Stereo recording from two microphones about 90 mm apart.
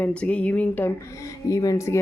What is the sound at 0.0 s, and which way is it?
Speech, 15° left (ahead or behind).